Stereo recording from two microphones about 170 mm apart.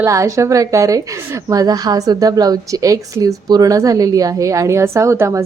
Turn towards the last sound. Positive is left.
turn(degrees=-15)  # may be behind; listen again after turning